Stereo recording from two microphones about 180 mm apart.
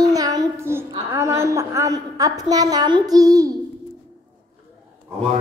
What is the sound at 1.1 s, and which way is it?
A woman's voice, 15° right (ahead or behind).